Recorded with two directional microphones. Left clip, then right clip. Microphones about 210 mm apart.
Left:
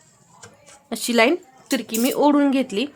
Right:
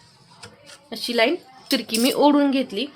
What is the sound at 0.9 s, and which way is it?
Speech, 30° left (ahead or behind).